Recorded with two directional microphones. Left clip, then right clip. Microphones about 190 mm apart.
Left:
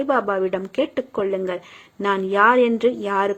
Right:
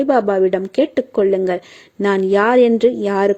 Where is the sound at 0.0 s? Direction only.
40° right (ahead or behind).